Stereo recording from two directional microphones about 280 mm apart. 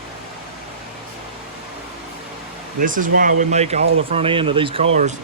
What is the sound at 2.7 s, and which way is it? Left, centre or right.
Speech, right.